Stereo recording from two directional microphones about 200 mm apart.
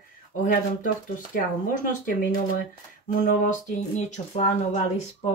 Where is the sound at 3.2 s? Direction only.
40° left (ahead or behind).